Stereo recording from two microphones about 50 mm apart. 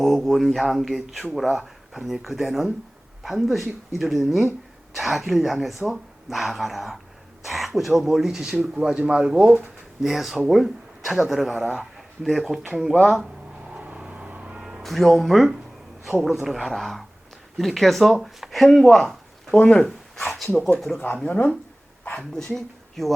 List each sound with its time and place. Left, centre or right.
0.0 s speech: centre
13.7 s vehicle: right
14.6 s music: centre
14.8 s speech: centre
19.5 s speech: left
20.7 s speech: centre
21.2 s speech: left
22.5 s speech: centre